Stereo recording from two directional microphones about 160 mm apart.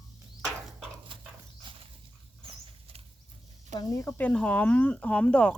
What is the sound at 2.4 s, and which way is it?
Rodents, 35° right (ahead or behind).